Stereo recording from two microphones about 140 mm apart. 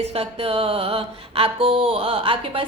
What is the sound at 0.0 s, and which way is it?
A woman's voice, 45° right (ahead or behind).